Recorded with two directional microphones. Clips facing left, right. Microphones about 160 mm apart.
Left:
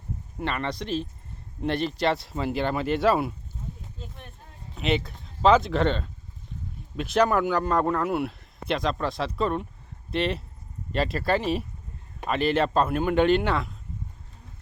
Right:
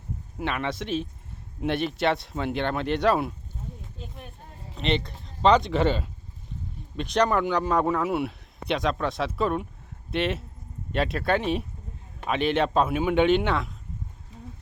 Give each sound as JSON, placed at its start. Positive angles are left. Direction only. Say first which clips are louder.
{"t": 0.3, "sound": "speech", "louder": "right 1 dB", "side_deg": 0}
{"t": 4.7, "sound": "speech", "louder": "left 1 dB", "side_deg": 5}